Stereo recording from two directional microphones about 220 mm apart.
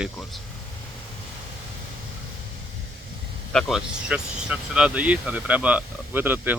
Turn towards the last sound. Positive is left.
turn(degrees=-10)  # may be behind; listen again after turning